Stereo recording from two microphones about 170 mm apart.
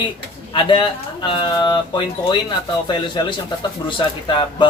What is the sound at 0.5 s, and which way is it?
Speech, 30° left (ahead or behind).